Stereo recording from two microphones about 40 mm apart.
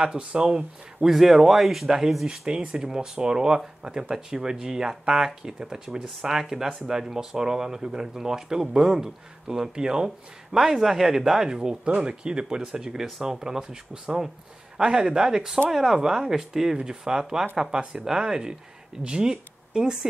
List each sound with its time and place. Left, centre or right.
0.0 s speech: right
1.0 s a man's voice: centre